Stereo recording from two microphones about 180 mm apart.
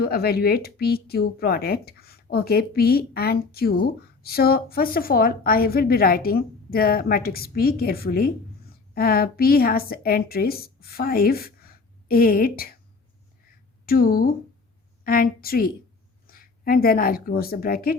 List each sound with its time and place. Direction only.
0.0 s a woman's voice: 60° left (ahead or behind)
13.8 s a woman's voice: 55° left (ahead or behind)